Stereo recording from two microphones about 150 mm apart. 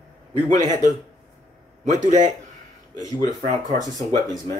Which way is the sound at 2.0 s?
55° right (ahead or behind).